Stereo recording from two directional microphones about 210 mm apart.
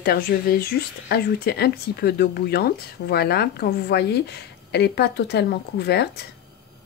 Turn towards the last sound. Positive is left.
turn(degrees=50)  # may be behind; listen again after turning